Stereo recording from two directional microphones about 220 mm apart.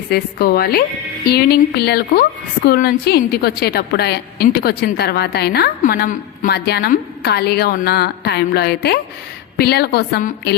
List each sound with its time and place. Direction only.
0.1 s a woman's voice: 45° left (ahead or behind)